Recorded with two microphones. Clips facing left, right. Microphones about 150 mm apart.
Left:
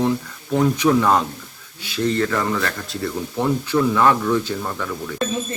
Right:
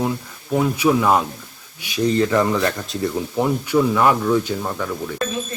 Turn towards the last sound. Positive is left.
turn(degrees=-10)  # may be behind; listen again after turning